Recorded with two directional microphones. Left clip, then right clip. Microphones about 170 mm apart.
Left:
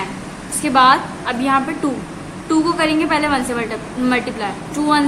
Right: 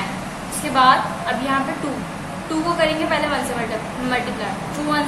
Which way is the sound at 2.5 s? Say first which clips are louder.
Left 3 dB; 40° left (ahead or behind).